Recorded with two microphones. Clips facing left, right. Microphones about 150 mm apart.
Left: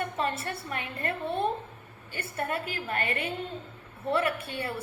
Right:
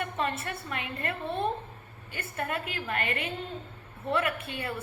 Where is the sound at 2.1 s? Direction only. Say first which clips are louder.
Left 1 dB; 35° left (ahead or behind).